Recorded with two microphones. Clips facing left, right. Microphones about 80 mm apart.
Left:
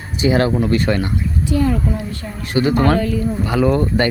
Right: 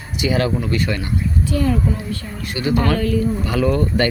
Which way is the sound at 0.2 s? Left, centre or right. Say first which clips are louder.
Left 4 dB; left.